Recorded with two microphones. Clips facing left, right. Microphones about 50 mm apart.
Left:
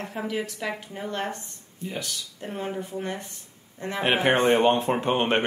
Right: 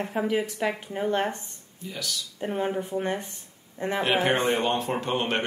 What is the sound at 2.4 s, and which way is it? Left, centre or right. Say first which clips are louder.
Speech: right 4 dB; centre.